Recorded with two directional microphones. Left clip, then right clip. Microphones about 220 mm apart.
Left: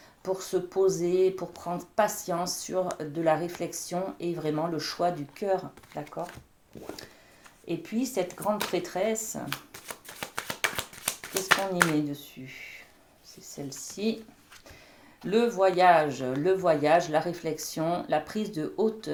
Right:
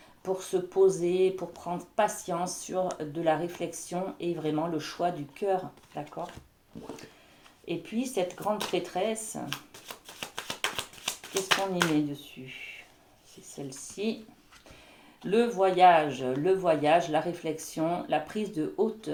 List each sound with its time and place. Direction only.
0.3 s speech: 30° left (ahead or behind)
7.9 s a sound: 25° left (ahead or behind)
13.7 s speech: 30° left (ahead or behind)
15.2 s speech: 30° left (ahead or behind)